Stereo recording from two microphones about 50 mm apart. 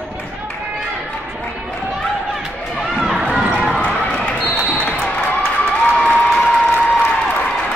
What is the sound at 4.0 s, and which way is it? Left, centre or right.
Basketball bounce, centre.